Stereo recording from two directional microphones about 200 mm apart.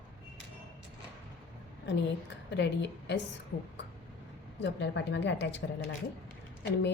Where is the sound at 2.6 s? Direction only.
60° left (ahead or behind).